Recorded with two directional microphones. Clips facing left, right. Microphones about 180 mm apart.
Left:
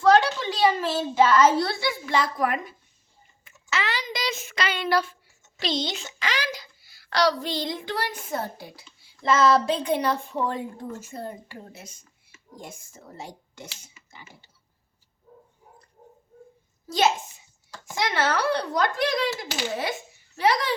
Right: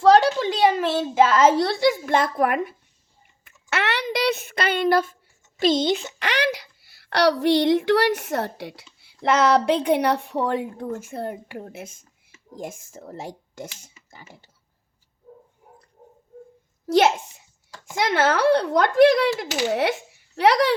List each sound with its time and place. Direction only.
0.0 s a child's voice: 35° right (ahead or behind)
16.8 s a child's voice: 65° right (ahead or behind)
17.9 s speech: 55° right (ahead or behind)
19.4 s a child's voice: 70° right (ahead or behind)